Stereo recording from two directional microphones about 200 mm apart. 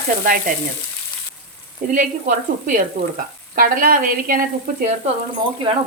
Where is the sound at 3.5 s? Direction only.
45° right (ahead or behind).